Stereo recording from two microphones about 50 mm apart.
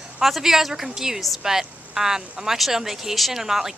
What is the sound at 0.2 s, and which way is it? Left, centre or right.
Speech, centre.